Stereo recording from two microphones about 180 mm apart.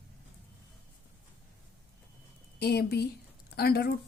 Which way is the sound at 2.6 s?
60° left (ahead or behind).